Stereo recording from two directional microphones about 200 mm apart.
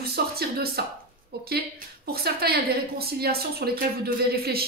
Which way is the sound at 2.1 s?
50° right (ahead or behind).